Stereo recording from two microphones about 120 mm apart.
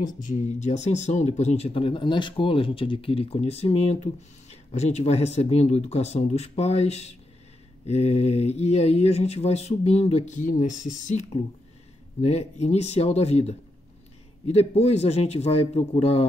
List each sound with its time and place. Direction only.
0.0 s speech: 90° left
12.2 s speech: 60° left (ahead or behind)